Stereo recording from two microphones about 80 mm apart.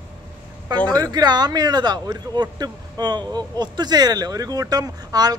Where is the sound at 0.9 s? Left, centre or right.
Right.